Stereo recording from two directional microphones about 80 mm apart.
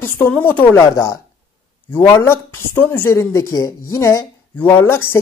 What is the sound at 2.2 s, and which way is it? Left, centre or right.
A woman's voice, left.